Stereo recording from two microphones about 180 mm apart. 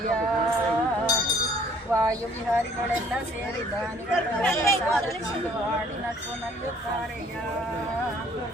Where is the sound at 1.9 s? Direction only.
15° right (ahead or behind).